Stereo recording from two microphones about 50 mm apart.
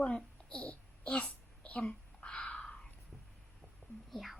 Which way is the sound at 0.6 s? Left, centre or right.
Left.